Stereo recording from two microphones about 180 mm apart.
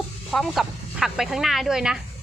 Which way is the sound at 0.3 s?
Centre (ahead or behind).